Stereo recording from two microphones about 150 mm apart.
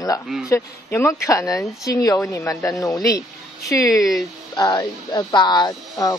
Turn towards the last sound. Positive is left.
turn(degrees=25)  # may be behind; listen again after turning